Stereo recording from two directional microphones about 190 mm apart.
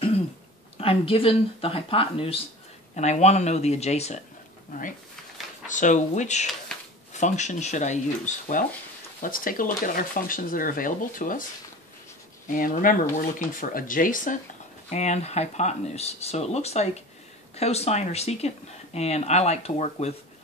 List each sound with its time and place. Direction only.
0.7 s speech: 30° left (ahead or behind)
5.7 s speech: 40° left (ahead or behind)
6.7 s a sound: 5° left (ahead or behind)
7.2 s speech: 40° left (ahead or behind)
12.4 s speech: 45° left (ahead or behind)